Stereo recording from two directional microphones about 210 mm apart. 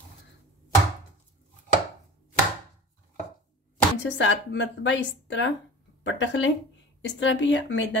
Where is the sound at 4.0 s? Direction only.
60° left (ahead or behind).